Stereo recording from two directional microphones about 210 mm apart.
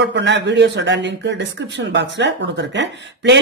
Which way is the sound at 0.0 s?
55° right (ahead or behind).